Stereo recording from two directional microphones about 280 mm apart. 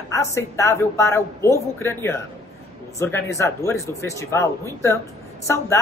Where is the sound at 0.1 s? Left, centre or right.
Centre.